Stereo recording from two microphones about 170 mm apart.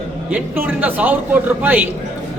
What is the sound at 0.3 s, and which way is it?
Speech, 10° right (ahead or behind).